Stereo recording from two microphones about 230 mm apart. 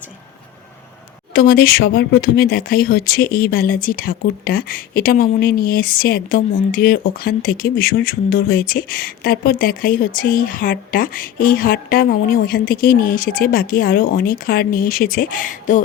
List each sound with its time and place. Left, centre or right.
1.3 s speech: left